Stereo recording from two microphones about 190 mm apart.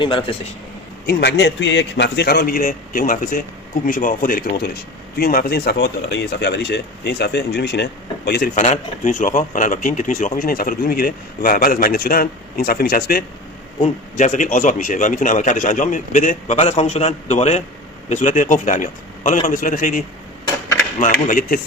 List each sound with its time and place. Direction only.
0.0 s speech: 25° left (ahead or behind)
1.0 s speech: 65° left (ahead or behind)
8.5 s speech: 40° left (ahead or behind)
13.8 s a man's voice: 35° left (ahead or behind)